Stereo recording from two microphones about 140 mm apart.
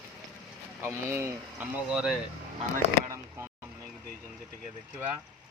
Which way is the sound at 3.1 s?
20° right (ahead or behind).